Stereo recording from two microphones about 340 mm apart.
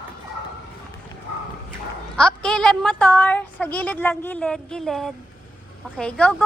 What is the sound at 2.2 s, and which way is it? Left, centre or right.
A woman's voice, centre.